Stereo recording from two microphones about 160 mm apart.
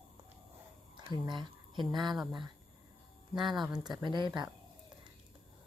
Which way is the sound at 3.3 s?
Centre (ahead or behind).